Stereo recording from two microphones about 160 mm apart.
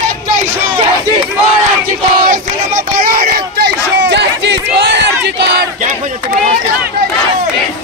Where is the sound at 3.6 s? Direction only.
90° right.